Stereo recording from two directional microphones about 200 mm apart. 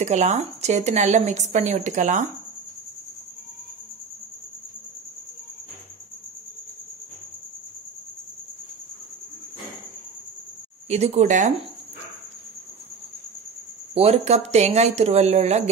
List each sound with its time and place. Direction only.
0.0 s a woman's voice: 35° right (ahead or behind)
10.9 s a woman's voice: 35° right (ahead or behind)
13.9 s a woman's voice: 30° right (ahead or behind)